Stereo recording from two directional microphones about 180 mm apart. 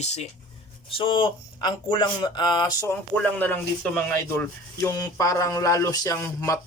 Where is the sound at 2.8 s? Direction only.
10° left (ahead or behind).